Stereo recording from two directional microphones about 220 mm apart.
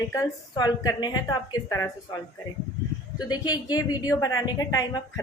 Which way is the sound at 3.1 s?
20° left (ahead or behind).